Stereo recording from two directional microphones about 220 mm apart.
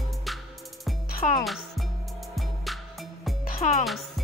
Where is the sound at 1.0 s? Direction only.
40° left (ahead or behind).